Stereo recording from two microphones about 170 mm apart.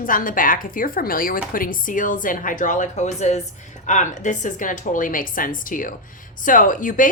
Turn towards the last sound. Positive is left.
turn(degrees=50)  # may be behind; listen again after turning